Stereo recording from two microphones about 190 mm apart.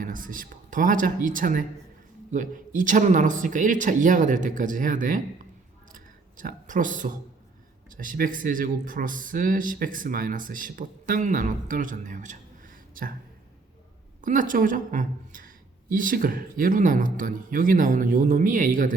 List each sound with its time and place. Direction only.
0.0 s speech: 45° right (ahead or behind)
5.9 s a sound: 45° right (ahead or behind)
7.9 s speech: 45° right (ahead or behind)
14.2 s speech: 45° right (ahead or behind)